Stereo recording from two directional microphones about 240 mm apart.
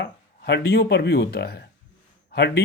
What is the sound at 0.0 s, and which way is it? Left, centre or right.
Speech, left.